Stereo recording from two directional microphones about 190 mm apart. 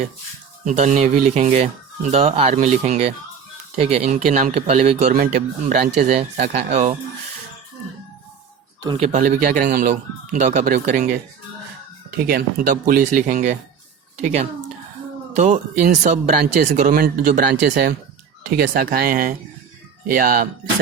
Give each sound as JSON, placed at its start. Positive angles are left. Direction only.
{"t": 0.6, "sound": "speech", "side_deg": -40}
{"t": 5.1, "sound": "speech", "side_deg": -45}
{"t": 9.0, "sound": "speech", "side_deg": -35}
{"t": 9.4, "sound": "speech", "side_deg": -50}
{"t": 15.4, "sound": "speech", "side_deg": -40}